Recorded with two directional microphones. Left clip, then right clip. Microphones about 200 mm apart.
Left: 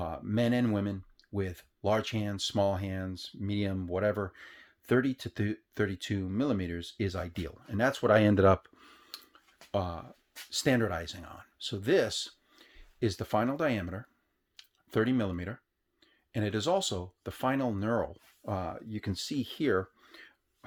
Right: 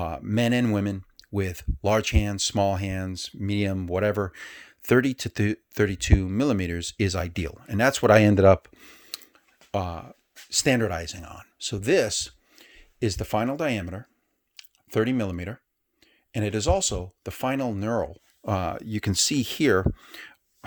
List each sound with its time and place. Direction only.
0.0 s speech: 40° right (ahead or behind)
18.4 s speech: 45° right (ahead or behind)